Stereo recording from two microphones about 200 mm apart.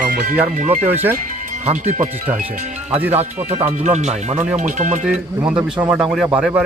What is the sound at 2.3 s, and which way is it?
Speech, 35° right (ahead or behind).